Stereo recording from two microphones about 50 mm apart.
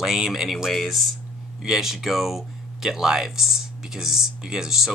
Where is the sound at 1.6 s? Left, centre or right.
Centre.